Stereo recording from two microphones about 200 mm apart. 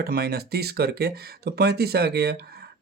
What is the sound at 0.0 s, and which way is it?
Speech, 50° right (ahead or behind).